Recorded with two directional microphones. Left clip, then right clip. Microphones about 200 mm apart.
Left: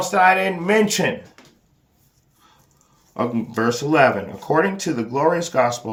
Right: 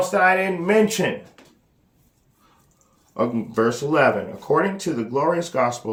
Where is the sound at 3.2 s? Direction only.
40° left (ahead or behind).